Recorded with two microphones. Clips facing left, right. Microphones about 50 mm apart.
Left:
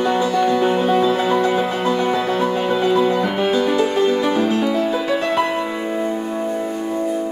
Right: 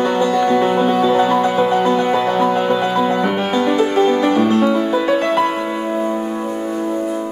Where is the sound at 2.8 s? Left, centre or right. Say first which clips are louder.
Even; centre.